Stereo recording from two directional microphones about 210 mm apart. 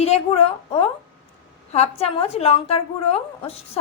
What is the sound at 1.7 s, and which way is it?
A woman's voice, 30° left (ahead or behind).